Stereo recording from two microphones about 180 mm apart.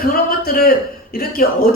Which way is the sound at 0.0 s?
55° left (ahead or behind).